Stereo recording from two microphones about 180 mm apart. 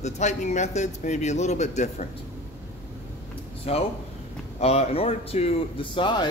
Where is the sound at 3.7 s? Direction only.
35° left (ahead or behind).